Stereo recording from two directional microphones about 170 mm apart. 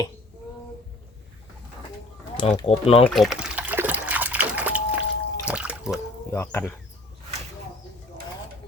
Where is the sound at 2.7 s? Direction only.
35° left (ahead or behind).